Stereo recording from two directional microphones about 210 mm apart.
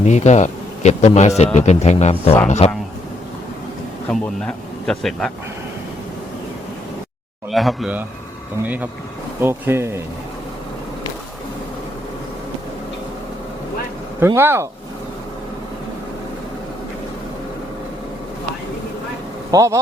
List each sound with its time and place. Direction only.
0.0 s a man's voice: 35° left (ahead or behind)
4.1 s a man's voice: centre (ahead or behind)
7.5 s a man's voice: centre (ahead or behind)
14.2 s speech: 10° right (ahead or behind)
19.5 s speech: 15° right (ahead or behind)